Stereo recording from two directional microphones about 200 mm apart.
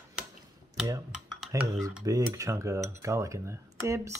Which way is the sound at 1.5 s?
15° right (ahead or behind).